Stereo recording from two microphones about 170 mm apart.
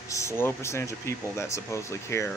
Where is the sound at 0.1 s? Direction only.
15° left (ahead or behind).